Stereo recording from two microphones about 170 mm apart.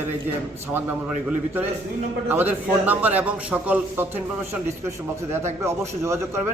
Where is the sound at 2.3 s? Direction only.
10° right (ahead or behind).